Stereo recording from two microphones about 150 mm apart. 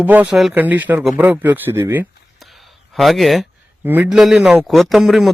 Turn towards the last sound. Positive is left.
turn(degrees=0)  # may be behind; listen again after turning